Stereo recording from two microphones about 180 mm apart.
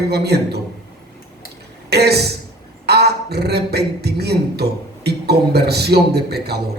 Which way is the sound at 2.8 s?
65° right (ahead or behind).